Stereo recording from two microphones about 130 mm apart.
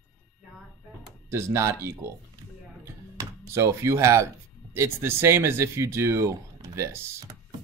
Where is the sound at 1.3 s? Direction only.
20° right (ahead or behind).